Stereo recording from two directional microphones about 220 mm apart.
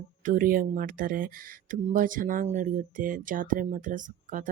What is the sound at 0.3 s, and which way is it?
A woman's voice, 40° right (ahead or behind).